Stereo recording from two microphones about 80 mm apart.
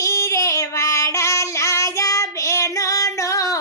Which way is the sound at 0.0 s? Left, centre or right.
Left.